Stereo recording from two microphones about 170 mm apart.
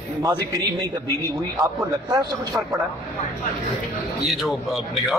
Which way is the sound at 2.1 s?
20° right (ahead or behind).